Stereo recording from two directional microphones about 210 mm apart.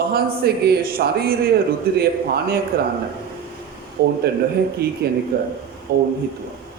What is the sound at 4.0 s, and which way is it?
A man's voice, 50° right (ahead or behind).